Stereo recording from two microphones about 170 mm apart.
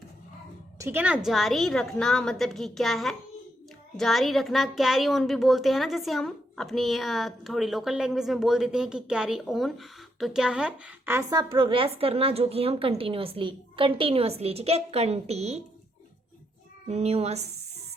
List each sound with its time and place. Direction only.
0.8 s a woman's voice: 10° right (ahead or behind); by 15.6 s 40° right (ahead or behind)
16.9 s speech: 40° right (ahead or behind)